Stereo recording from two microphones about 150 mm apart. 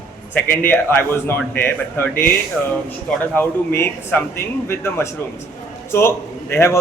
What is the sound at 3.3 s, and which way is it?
A man's voice, 15° left (ahead or behind).